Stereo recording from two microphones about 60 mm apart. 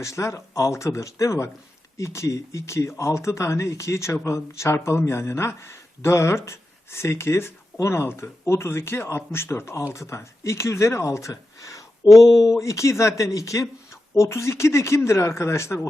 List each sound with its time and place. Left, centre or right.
0.0 s speech: left
12.0 s a sound: left
12.4 s speech: left
14.2 s speech: left